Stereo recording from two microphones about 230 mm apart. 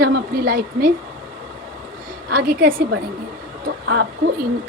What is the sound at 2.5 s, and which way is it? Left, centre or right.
Speech, right.